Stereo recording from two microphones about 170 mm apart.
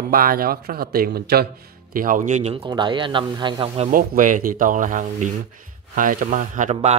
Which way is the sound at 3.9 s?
55° right (ahead or behind).